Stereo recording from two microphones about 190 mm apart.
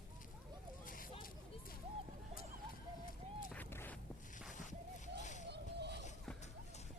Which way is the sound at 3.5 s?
10° left (ahead or behind).